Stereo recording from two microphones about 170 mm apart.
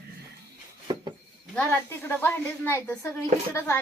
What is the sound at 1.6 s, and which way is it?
Speech, 10° left (ahead or behind).